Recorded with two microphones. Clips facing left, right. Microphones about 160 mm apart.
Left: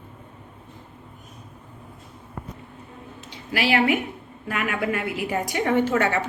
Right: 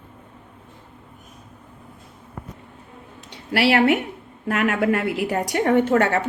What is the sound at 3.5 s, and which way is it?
Speech, 65° right (ahead or behind).